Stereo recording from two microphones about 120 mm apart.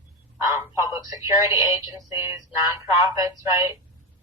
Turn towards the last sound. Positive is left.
turn(degrees=-30)  # may be behind; listen again after turning